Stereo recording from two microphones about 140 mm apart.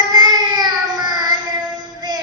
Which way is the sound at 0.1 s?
30° right (ahead or behind).